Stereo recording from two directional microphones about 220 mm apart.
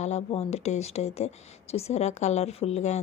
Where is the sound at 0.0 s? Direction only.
30° left (ahead or behind).